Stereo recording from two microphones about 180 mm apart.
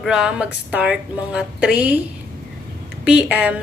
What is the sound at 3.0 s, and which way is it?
Speech, 5° right (ahead or behind).